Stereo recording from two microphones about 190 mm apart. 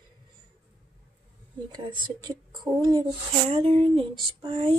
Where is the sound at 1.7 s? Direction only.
20° right (ahead or behind).